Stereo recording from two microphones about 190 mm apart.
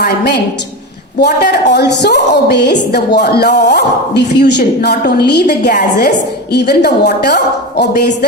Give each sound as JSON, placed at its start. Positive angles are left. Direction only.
{"t": 0.0, "sound": "a woman's voice", "side_deg": 60}